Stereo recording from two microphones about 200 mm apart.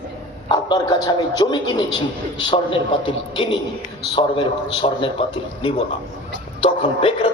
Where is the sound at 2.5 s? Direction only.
25° left (ahead or behind).